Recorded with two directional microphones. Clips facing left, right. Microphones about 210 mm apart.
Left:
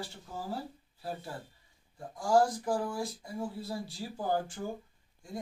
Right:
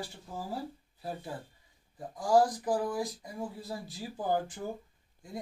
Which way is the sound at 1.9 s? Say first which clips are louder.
Right 1 dB; 20° right (ahead or behind).